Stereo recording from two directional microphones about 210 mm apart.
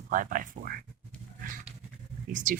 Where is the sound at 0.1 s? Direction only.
40° right (ahead or behind).